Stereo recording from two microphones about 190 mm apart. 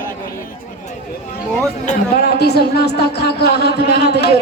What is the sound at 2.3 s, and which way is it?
Speech, 60° left (ahead or behind).